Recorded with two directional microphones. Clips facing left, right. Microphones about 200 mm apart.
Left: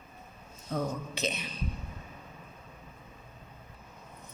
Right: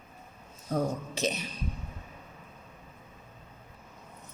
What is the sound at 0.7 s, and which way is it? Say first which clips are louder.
Speech: right 3 dB; 40° right (ahead or behind).